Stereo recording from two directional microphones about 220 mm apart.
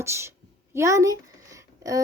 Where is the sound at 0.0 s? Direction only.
10° right (ahead or behind).